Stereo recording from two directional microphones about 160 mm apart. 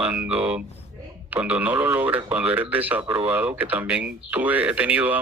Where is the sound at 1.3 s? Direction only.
10° right (ahead or behind).